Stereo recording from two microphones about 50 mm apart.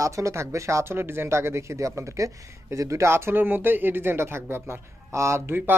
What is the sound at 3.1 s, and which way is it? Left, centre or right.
Speech, right.